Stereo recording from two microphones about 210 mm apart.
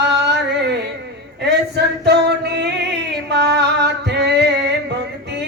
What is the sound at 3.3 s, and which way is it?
Music, 55° right (ahead or behind).